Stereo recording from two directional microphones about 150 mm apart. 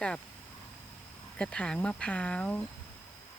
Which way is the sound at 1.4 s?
5° left (ahead or behind).